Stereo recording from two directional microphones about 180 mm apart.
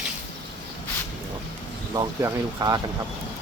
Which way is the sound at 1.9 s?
20° right (ahead or behind).